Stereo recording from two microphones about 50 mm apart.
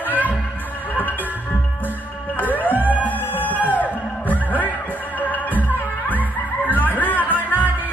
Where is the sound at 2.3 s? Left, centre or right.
Left.